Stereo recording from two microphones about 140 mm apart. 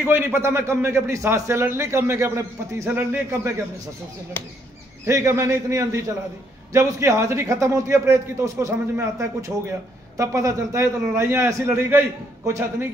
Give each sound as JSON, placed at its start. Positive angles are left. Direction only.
{"t": 0.0, "sound": "a man's voice", "side_deg": -15}
{"t": 5.0, "sound": "a man's voice", "side_deg": -20}